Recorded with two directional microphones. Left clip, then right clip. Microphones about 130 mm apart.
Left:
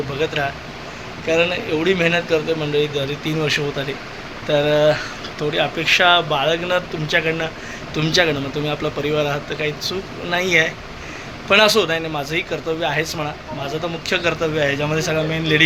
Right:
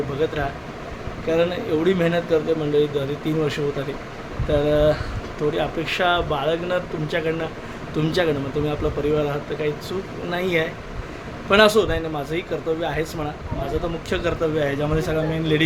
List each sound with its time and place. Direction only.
0.2 s speech: 20° right (ahead or behind)